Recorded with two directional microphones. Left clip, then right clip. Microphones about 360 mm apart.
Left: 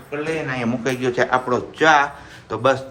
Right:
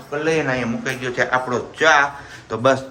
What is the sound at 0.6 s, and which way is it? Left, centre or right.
A man's voice, centre.